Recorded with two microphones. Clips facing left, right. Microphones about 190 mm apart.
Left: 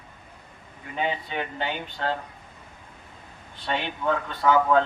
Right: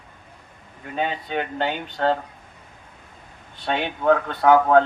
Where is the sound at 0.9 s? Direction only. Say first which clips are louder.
Right 3 dB; 65° right (ahead or behind).